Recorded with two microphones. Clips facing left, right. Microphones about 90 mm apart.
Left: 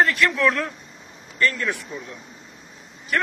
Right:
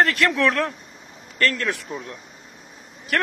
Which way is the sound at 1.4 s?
85° right.